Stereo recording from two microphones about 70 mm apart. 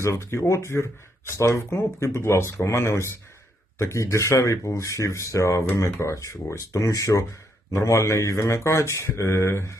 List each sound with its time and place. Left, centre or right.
0.0 s speech: left